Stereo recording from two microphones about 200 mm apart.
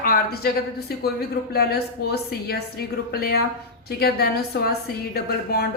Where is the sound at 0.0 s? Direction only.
50° left (ahead or behind).